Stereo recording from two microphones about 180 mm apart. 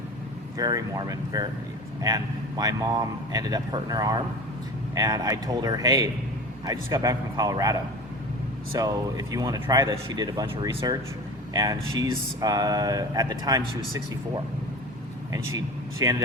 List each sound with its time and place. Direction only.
0.5 s speech: 20° right (ahead or behind)
8.8 s speech: 20° right (ahead or behind)
15.3 s speech: 20° right (ahead or behind)